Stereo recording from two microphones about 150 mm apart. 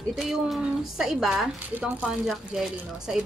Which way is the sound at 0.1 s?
Centre (ahead or behind).